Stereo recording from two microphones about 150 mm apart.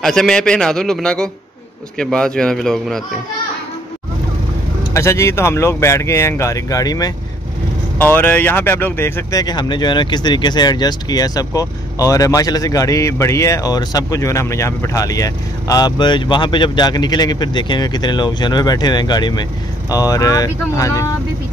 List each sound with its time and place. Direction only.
0.0 s a man's voice: 5° left (ahead or behind)
4.9 s speech: 20° left (ahead or behind)
8.0 s speech: 10° left (ahead or behind)